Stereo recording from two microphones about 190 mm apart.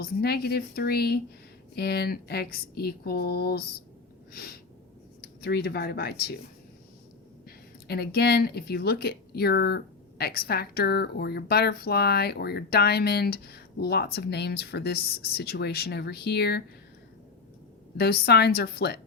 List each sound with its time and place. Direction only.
0.0 s speech: 55° left (ahead or behind)
4.3 s a sound: 55° left (ahead or behind)
5.2 s speech: 60° left (ahead or behind)
7.9 s speech: 60° left (ahead or behind)
17.9 s speech: 55° left (ahead or behind)